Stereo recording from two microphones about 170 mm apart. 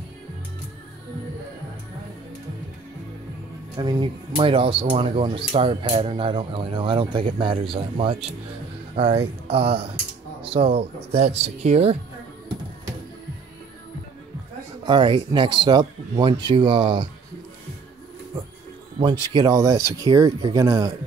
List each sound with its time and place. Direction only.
3.7 s speech: 25° right (ahead or behind)
14.9 s speech: 30° right (ahead or behind)
19.2 s speech: 25° right (ahead or behind)